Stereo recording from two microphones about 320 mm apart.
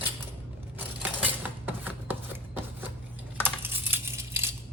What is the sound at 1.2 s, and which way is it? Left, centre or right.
Cutlery, centre.